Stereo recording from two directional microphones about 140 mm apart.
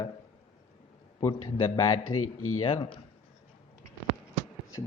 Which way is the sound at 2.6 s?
40° left (ahead or behind).